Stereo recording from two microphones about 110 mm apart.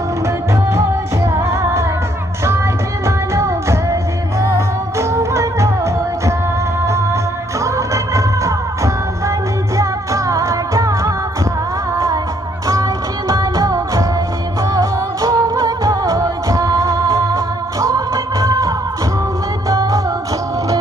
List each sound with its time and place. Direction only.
1.2 s music: 25° right (ahead or behind)
3.3 s music: 25° right (ahead or behind)